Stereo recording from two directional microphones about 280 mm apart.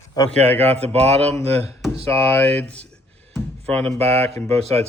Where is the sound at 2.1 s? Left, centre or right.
Centre.